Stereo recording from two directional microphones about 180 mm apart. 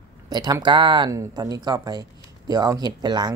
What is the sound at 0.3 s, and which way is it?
Speech, 20° right (ahead or behind).